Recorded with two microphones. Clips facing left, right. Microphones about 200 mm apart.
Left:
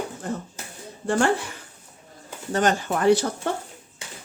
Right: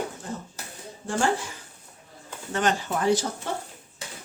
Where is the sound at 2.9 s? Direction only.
60° left (ahead or behind).